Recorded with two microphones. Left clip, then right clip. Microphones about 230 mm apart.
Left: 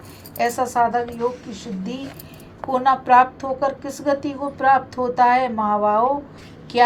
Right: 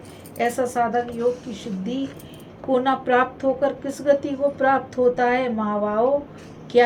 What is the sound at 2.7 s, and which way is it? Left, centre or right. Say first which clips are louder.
A woman's voice: left 4 dB; left.